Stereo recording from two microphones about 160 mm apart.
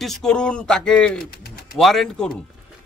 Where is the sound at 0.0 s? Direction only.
5° left (ahead or behind).